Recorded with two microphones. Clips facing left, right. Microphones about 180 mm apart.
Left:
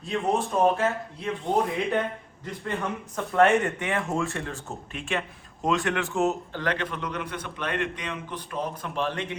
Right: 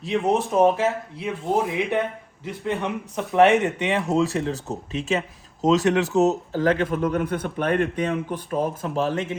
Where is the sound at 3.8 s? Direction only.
20° right (ahead or behind).